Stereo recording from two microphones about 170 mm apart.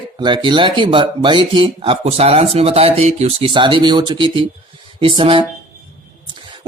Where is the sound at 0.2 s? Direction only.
25° right (ahead or behind).